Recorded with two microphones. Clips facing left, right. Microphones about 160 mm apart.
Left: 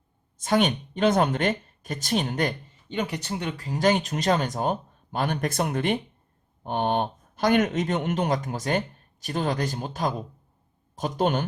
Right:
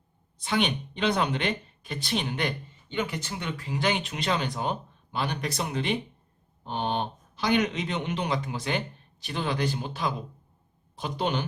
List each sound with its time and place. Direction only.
0.3 s speech: 45° left (ahead or behind)